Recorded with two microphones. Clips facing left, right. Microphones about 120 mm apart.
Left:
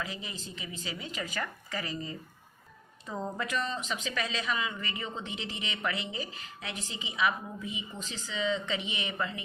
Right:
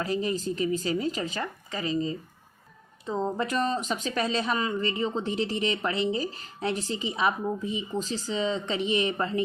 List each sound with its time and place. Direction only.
0.0 s speech: 40° right (ahead or behind)